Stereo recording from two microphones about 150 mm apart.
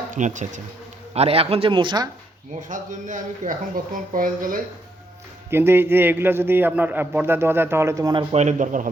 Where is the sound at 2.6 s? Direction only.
60° right (ahead or behind).